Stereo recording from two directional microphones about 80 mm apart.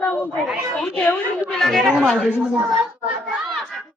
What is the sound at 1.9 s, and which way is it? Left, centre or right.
Speech, centre.